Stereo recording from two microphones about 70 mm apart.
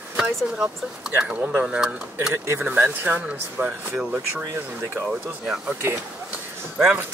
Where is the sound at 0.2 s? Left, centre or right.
Centre.